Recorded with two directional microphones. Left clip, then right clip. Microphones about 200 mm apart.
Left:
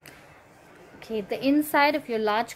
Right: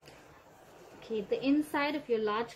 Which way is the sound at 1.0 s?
60° left (ahead or behind).